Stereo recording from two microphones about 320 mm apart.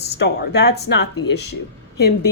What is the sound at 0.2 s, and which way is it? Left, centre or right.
A woman's voice, left.